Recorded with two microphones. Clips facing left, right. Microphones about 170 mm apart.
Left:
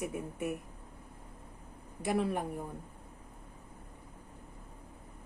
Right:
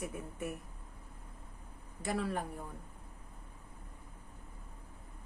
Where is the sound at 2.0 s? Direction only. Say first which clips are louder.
Left 4 dB; 15° left (ahead or behind).